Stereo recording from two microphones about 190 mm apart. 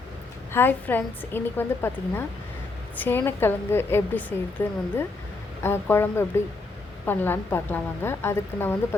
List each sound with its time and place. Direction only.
0.5 s a woman's voice: 10° left (ahead or behind)